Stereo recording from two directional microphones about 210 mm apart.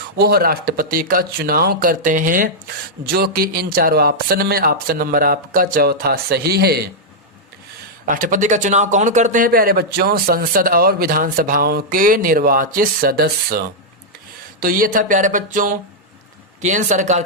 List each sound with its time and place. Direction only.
0.2 s speech: 45° right (ahead or behind)
8.0 s speech: 40° right (ahead or behind)